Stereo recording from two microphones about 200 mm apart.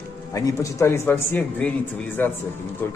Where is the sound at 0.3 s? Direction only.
15° left (ahead or behind).